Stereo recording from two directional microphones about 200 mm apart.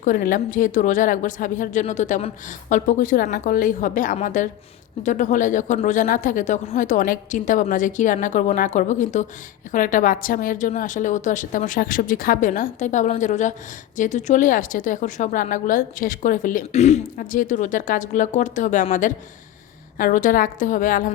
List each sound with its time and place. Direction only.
0.0 s a woman's voice: 45° left (ahead or behind)